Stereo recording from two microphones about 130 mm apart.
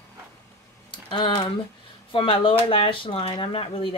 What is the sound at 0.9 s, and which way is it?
Speech, 40° left (ahead or behind).